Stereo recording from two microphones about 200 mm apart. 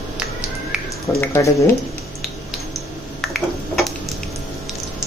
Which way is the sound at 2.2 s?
Centre (ahead or behind).